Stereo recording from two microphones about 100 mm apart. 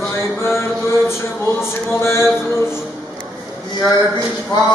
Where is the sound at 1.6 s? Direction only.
25° left (ahead or behind).